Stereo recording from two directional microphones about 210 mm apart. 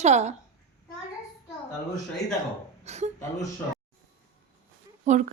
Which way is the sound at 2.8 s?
30° right (ahead or behind).